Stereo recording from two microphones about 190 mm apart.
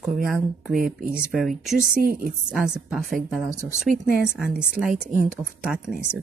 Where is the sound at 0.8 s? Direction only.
50° right (ahead or behind).